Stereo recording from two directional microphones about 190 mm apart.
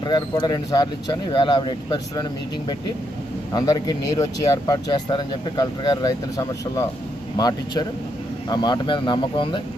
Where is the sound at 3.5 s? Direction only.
20° left (ahead or behind).